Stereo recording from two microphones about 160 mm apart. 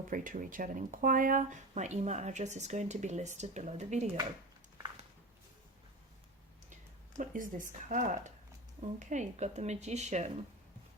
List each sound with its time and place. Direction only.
0.1 s speech: 60° right (ahead or behind)
7.2 s speech: 55° right (ahead or behind)